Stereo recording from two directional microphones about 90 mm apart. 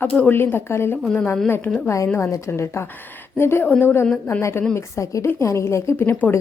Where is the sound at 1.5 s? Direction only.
15° left (ahead or behind).